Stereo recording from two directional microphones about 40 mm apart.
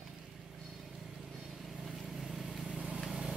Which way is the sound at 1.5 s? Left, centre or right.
Centre.